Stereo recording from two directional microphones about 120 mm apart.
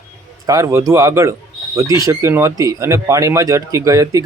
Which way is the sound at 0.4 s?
25° right (ahead or behind).